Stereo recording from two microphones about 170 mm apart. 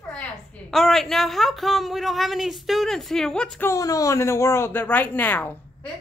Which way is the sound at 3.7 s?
20° left (ahead or behind).